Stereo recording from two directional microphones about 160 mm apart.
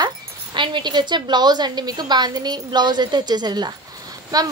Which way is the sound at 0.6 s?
30° right (ahead or behind).